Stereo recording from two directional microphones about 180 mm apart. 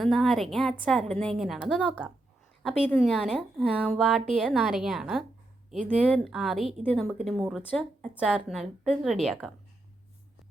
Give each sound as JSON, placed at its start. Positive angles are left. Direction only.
{"t": 0.0, "sound": "a woman's voice", "side_deg": 0}